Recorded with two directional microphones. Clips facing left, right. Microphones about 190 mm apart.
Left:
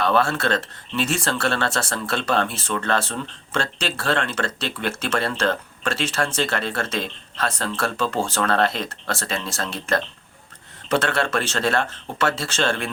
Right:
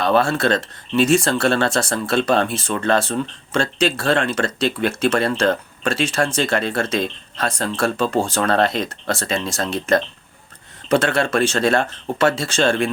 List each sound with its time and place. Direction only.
0.1 s speech: 15° right (ahead or behind)